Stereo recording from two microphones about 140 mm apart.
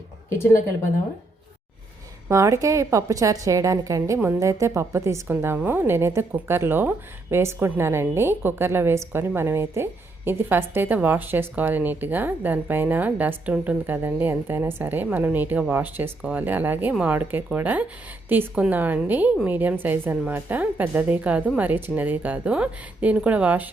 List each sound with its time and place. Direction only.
2.3 s a woman's voice: 20° right (ahead or behind)